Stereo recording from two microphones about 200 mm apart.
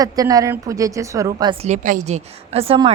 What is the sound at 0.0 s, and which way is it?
A woman's voice, 20° right (ahead or behind).